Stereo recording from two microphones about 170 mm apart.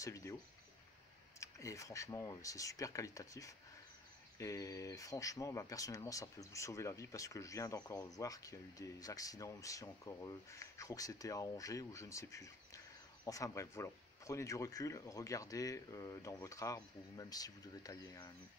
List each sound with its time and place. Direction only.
0.0 s speech: 20° left (ahead or behind)
1.4 s speech: 20° left (ahead or behind)